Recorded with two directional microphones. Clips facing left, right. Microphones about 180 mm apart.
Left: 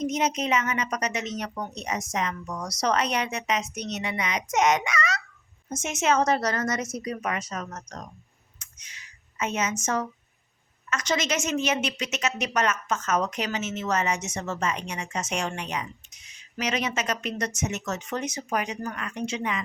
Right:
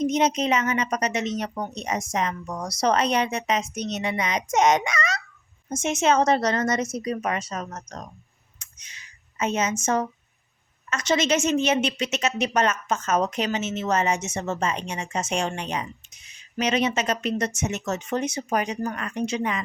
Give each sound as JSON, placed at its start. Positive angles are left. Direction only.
{"t": 0.1, "sound": "a woman's voice", "side_deg": -30}
{"t": 9.4, "sound": "a woman's voice", "side_deg": -30}